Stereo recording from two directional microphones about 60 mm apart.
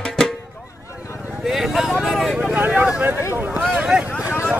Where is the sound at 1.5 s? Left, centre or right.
Centre.